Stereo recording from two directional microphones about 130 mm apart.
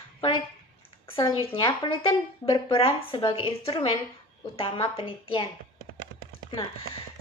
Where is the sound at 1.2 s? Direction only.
40° left (ahead or behind).